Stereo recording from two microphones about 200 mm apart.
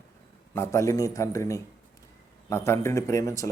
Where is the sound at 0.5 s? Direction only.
15° left (ahead or behind).